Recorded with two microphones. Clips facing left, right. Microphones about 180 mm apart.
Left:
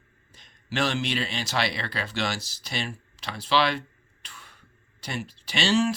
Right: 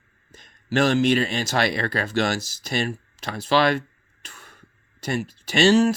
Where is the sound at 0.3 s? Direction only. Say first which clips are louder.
Right 6 dB; 45° right (ahead or behind).